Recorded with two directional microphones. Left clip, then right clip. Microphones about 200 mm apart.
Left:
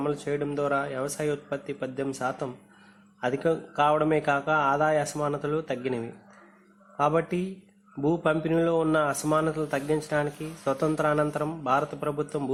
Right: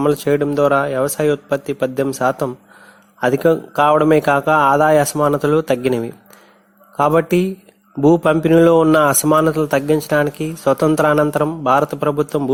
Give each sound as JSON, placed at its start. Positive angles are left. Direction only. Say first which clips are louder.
{"t": 0.0, "sound": "a man's voice", "louder": "right 13 dB", "side_deg": -50}